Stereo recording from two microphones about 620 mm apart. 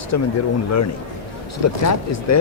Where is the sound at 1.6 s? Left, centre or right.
Left.